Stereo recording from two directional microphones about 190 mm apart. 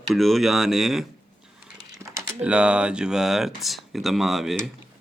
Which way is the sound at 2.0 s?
20° right (ahead or behind).